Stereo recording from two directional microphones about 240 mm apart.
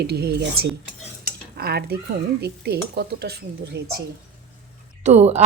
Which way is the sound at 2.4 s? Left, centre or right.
Right.